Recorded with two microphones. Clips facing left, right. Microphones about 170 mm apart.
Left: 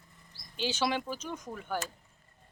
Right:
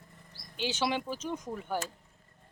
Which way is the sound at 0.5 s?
20° right (ahead or behind).